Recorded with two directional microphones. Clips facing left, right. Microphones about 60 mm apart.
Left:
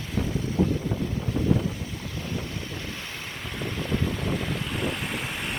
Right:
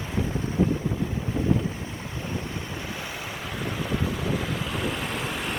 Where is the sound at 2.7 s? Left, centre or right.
Centre.